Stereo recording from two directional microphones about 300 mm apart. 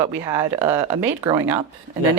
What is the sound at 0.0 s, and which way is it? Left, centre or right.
Speech, centre.